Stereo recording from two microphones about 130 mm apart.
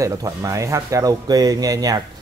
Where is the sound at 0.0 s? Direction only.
25° right (ahead or behind).